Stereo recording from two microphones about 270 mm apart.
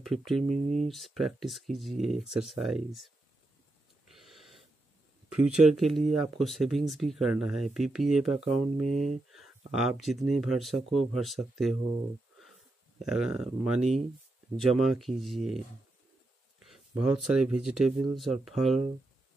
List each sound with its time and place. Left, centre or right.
0.0 s speech: centre
0.4 s speech: right
0.8 s speech: centre
4.1 s a sound: centre
5.3 s speech: centre
9.3 s a sound: centre
10.3 s speech: centre
13.0 s speech: centre
16.6 s speech: centre